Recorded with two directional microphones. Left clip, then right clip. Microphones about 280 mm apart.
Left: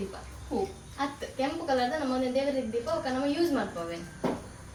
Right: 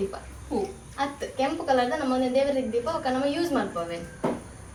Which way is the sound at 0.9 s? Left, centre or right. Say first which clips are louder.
Right 4 dB; centre.